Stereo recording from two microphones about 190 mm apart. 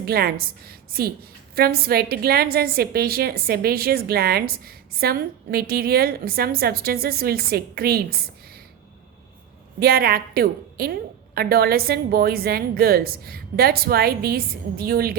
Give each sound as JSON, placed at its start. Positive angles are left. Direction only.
{"t": 0.0, "sound": "a woman's voice", "side_deg": -55}
{"t": 9.8, "sound": "a woman's voice", "side_deg": -55}